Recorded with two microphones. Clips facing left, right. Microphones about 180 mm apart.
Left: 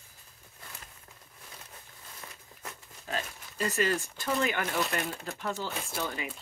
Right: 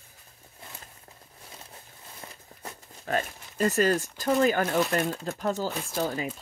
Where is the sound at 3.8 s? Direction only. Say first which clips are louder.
Right 3 dB; 40° right (ahead or behind).